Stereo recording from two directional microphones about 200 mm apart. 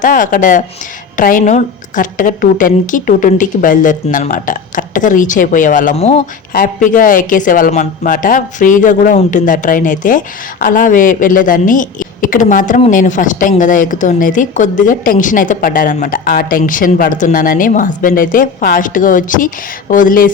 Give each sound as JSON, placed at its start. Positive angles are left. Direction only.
{"t": 0.0, "sound": "a woman's voice", "side_deg": 40}